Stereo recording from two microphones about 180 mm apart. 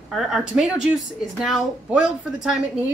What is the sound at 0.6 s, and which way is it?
Speech, 5° right (ahead or behind).